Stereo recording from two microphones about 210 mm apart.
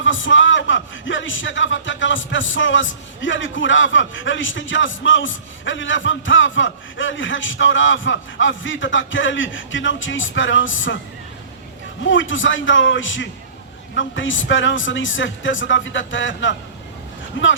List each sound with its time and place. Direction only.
0.0 s a man's voice: 65° left (ahead or behind)
12.0 s a man's voice: 65° left (ahead or behind)